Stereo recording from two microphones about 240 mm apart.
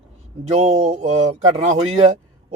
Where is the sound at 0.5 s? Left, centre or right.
Right.